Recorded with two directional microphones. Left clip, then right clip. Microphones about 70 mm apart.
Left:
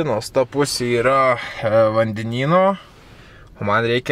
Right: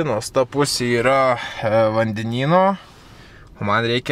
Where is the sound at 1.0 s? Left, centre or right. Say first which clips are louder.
Left 1 dB; centre.